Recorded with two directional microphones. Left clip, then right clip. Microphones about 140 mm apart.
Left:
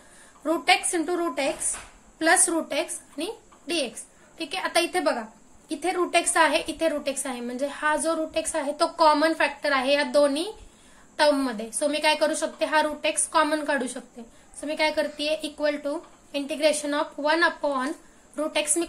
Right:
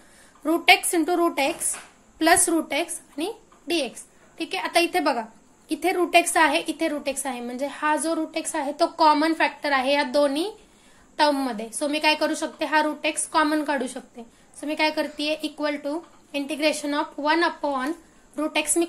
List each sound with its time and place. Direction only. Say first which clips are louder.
0.4 s a woman's voice: right 4 dB; 40° right (ahead or behind)